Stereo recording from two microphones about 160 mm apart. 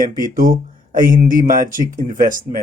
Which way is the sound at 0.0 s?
60° right (ahead or behind).